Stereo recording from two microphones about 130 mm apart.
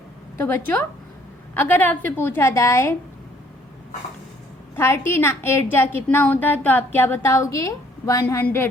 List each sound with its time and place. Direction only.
0.3 s speech: 15° left (ahead or behind)
4.7 s a woman's voice: 20° left (ahead or behind)